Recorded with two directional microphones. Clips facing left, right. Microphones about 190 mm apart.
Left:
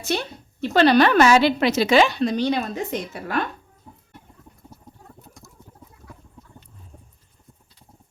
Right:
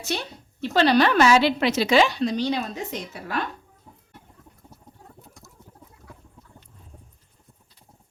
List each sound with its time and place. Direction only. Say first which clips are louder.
0.0 s a woman's voice: left 4 dB; 55° left (ahead or behind)